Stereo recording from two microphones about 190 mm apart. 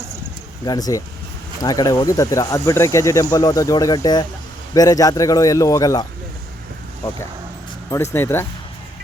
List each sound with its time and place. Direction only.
0.6 s a man's voice: 20° left (ahead or behind)
7.9 s a man's voice: 15° left (ahead or behind)